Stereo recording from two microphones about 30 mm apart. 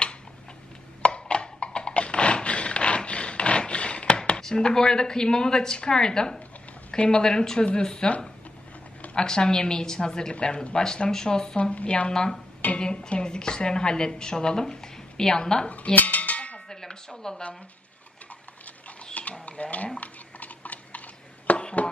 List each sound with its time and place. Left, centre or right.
1.0 s music: left
3.1 s rub: left
4.4 s a sound: centre
4.6 s a woman's voice: left
9.1 s a woman's voice: left
11.1 s a woman's voice: left
11.7 s speech: left
12.1 s a woman's voice: left
15.9 s cowbell: left
16.6 s tubular bells: centre
19.2 s livestock: left
19.5 s speech: left
20.0 s a sound: left